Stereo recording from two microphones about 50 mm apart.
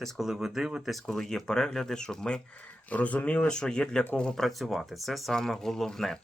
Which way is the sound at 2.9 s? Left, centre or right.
Left.